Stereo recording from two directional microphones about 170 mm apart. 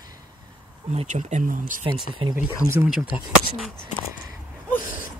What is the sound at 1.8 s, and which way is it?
Speech, 30° right (ahead or behind).